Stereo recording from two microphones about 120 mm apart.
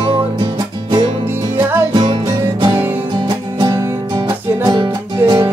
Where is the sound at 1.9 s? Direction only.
40° right (ahead or behind).